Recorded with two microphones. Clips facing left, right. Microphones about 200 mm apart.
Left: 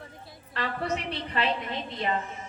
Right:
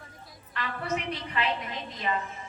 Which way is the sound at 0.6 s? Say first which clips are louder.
Left 3 dB; 35° left (ahead or behind).